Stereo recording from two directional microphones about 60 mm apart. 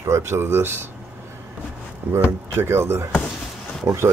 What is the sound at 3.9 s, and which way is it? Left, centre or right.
Speech, right.